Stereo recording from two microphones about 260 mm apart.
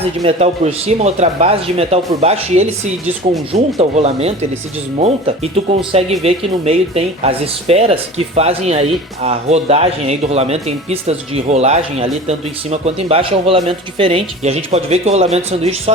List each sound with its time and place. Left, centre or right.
0.0 s speech: right